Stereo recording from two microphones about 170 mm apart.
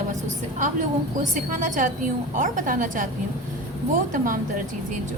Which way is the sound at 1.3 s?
50° right (ahead or behind).